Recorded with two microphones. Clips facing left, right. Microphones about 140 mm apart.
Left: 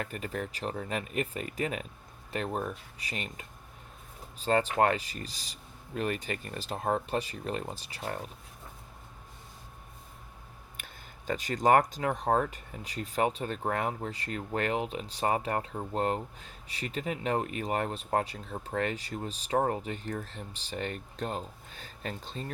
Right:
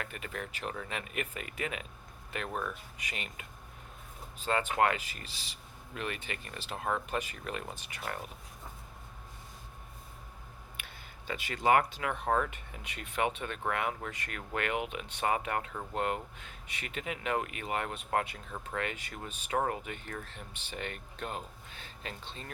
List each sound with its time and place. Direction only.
0.0 s speech: 40° left (ahead or behind)
10.8 s speech: 45° left (ahead or behind)